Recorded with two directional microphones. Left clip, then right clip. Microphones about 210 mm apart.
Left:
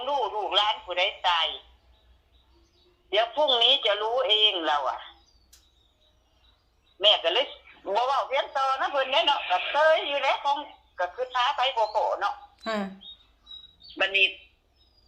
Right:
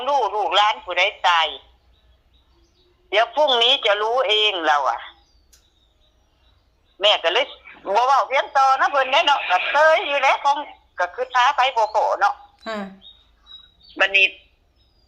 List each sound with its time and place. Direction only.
0.0 s a man's voice: 50° right (ahead or behind)
3.1 s a man's voice: 50° right (ahead or behind)
7.0 s a man's voice: 50° right (ahead or behind)
12.5 s speech: 5° right (ahead or behind)
13.9 s a man's voice: 50° right (ahead or behind)